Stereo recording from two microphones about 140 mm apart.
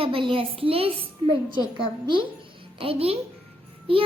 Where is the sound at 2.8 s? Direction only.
40° right (ahead or behind).